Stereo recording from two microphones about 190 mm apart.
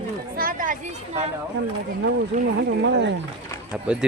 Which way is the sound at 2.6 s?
65° right (ahead or behind).